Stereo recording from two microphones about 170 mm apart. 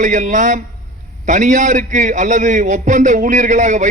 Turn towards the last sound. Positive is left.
turn(degrees=-45)  # may be behind; listen again after turning